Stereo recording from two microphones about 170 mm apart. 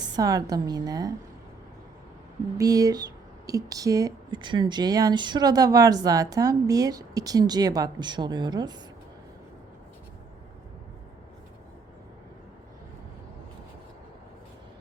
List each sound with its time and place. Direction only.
0.2 s speech: 20° right (ahead or behind)
2.6 s speech: 20° right (ahead or behind)